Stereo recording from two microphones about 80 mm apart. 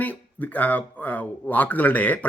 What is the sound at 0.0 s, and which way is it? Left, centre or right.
Speech, left.